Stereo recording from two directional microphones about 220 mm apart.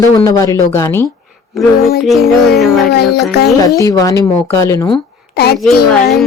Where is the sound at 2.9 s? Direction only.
45° left (ahead or behind).